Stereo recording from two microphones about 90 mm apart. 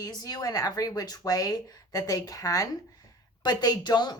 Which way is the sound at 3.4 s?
50° left (ahead or behind).